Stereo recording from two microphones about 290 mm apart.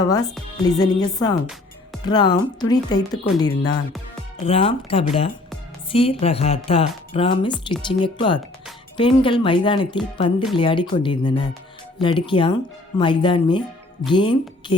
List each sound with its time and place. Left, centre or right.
0.8 s speech: centre